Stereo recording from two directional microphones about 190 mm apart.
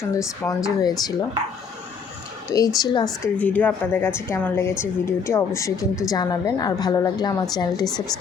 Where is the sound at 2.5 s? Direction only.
15° left (ahead or behind).